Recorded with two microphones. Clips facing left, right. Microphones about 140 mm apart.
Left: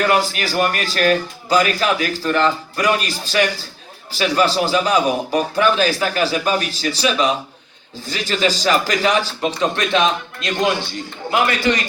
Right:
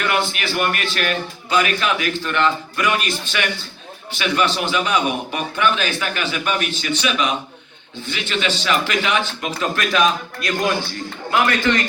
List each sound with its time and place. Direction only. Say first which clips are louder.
0.0 s a man's voice: left 4 dB; 40° left (ahead or behind); by 11.9 s 15° left (ahead or behind)